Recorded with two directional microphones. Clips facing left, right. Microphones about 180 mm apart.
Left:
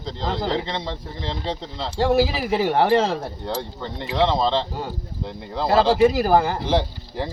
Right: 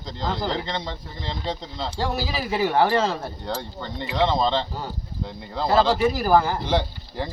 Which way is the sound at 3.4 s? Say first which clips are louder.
Left 2 dB; centre (ahead or behind).